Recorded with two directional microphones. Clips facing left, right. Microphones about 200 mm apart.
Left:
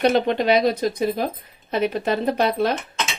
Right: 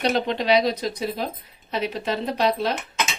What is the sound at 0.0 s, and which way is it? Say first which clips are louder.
Speech: left 5 dB; 55° left (ahead or behind).